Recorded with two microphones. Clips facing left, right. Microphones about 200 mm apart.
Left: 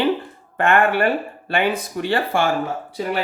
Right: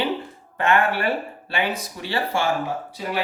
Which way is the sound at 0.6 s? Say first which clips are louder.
Left 4 dB; 55° left (ahead or behind).